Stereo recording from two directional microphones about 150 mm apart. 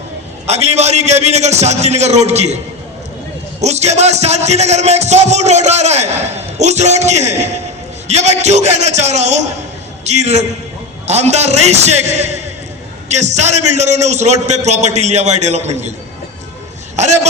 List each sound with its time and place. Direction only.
0.4 s a man's voice: 45° right (ahead or behind)
3.6 s a man's voice: 45° right (ahead or behind)